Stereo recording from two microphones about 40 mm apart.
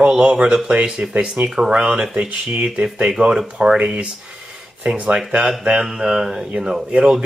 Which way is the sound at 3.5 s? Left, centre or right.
Right.